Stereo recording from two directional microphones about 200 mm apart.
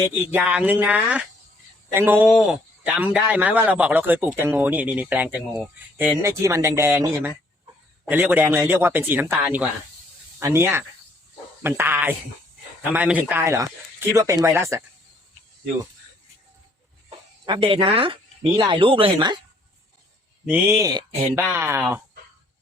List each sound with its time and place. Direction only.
0.3 s a man's voice: 5° right (ahead or behind)
17.1 s speech: 25° right (ahead or behind)
20.4 s a man's voice: 10° right (ahead or behind)